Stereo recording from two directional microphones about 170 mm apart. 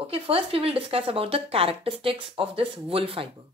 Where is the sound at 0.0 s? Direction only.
35° right (ahead or behind).